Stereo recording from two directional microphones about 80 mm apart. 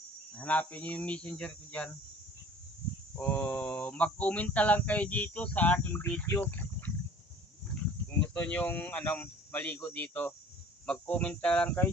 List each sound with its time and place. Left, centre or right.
0.3 s speech: centre
3.2 s speech: left
6.3 s a sound: left
8.2 s speech: centre